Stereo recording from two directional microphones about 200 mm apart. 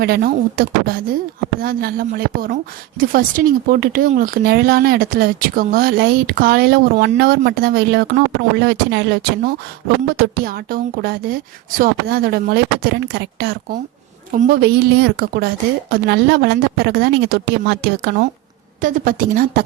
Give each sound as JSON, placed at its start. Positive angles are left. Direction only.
{"t": 0.0, "sound": "speech", "side_deg": -45}
{"t": 18.8, "sound": "speech", "side_deg": -40}